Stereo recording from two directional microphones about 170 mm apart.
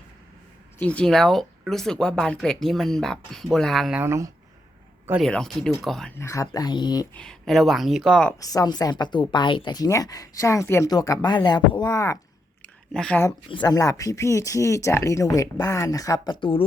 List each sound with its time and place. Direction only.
0.8 s speech: 5° left (ahead or behind)
4.0 s speech: 15° right (ahead or behind)
5.2 s speech: 5° left (ahead or behind)
6.1 s speech: 15° left (ahead or behind)
7.1 s speech: 5° left (ahead or behind)
8.4 s speech: 20° left (ahead or behind)
12.9 s speech: 5° left (ahead or behind)
13.5 s speech: 25° left (ahead or behind)